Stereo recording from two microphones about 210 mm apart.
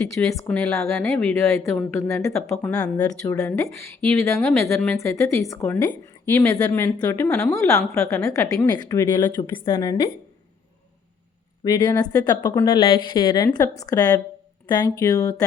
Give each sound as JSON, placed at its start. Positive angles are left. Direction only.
{"t": 0.0, "sound": "a woman's voice", "side_deg": 10}
{"t": 4.4, "sound": "speech", "side_deg": 0}
{"t": 4.9, "sound": "a woman's voice", "side_deg": 15}
{"t": 11.6, "sound": "a woman's voice", "side_deg": 15}